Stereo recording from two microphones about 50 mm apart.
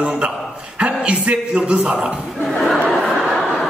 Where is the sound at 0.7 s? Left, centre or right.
Right.